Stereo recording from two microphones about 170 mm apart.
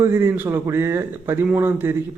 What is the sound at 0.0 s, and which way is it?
A man's voice, 15° right (ahead or behind).